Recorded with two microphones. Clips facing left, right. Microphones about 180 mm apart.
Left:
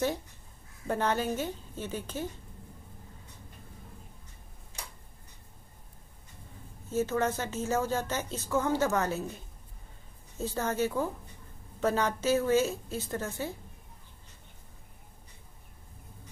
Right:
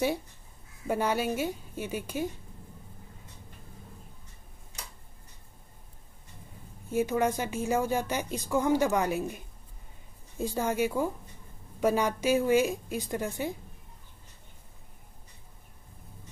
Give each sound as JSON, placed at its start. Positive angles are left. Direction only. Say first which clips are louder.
{"t": 0.8, "sound": "speech", "louder": "right 1 dB", "side_deg": -10}
{"t": 6.9, "sound": "speech", "louder": "right 2 dB", "side_deg": -15}